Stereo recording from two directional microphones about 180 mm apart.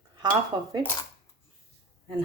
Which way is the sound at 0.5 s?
25° right (ahead or behind).